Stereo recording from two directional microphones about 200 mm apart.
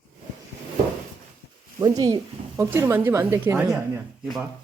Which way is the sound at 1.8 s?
20° right (ahead or behind).